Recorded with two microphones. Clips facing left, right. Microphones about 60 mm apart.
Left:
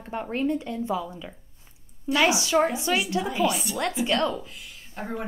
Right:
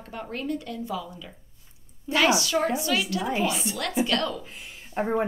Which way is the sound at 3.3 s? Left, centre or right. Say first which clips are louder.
Left 1 dB; right.